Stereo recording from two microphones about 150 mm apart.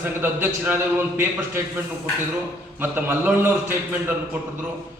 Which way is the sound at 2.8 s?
15° right (ahead or behind).